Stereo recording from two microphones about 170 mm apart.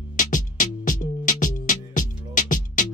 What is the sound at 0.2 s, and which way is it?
Music, 50° left (ahead or behind).